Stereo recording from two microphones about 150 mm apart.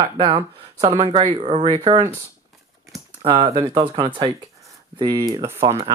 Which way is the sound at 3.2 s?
35° right (ahead or behind).